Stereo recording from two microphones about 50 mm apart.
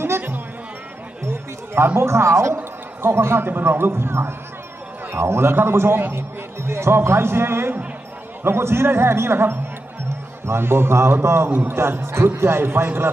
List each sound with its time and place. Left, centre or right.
1.2 s a sound: right
2.0 s speech: right
3.0 s speech: right
6.7 s speech: right